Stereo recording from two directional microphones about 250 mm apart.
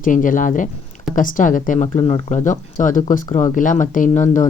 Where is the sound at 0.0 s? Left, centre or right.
Left.